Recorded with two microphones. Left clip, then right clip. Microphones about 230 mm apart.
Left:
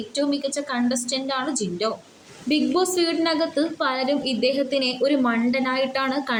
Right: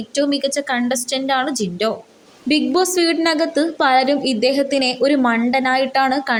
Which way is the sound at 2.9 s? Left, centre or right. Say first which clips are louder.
Right 5 dB; right.